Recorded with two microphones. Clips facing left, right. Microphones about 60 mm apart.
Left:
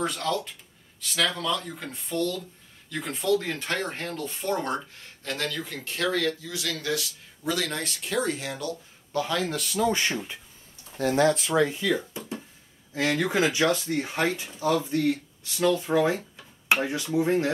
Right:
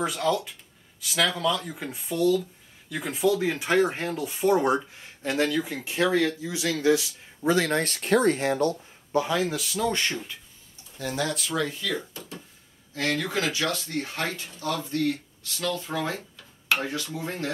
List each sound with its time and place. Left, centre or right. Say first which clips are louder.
0.0 s speech: right 2 dB; centre; by 8.7 s right
9.1 s speech: right 2 dB; centre
11.0 s speech: left 7 dB; left